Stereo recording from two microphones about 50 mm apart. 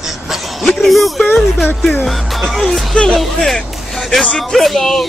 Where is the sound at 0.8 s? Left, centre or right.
Centre.